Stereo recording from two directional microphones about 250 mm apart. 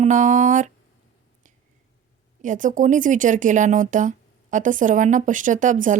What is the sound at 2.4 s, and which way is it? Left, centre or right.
A woman's voice, right.